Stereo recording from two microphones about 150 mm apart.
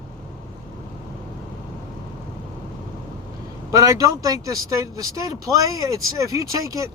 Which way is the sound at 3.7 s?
20° right (ahead or behind).